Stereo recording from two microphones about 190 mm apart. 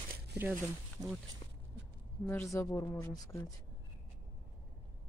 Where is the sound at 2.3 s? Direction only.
15° left (ahead or behind).